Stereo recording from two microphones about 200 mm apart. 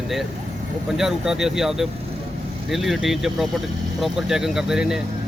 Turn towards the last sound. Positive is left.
turn(degrees=-5)  # may be behind; listen again after turning